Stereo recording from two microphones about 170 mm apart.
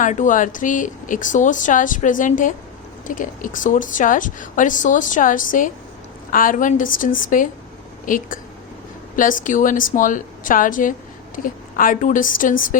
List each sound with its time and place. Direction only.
0.0 s a woman's voice: 50° left (ahead or behind)